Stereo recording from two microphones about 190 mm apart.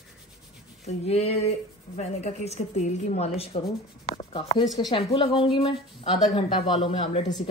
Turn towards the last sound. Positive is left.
turn(degrees=30)  # may be behind; listen again after turning